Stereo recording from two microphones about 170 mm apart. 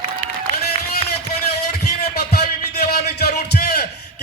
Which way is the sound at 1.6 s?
65° left (ahead or behind).